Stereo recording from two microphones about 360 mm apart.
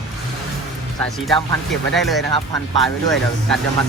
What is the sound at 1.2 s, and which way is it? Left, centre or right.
Speech, centre.